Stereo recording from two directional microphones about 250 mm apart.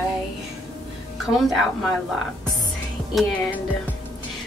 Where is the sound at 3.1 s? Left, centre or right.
Centre.